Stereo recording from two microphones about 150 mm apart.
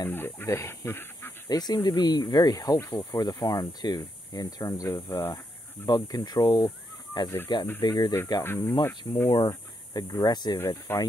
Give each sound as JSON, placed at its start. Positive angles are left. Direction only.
{"t": 0.0, "sound": "speech", "side_deg": 15}
{"t": 1.5, "sound": "speech", "side_deg": 25}
{"t": 10.9, "sound": "speech", "side_deg": 15}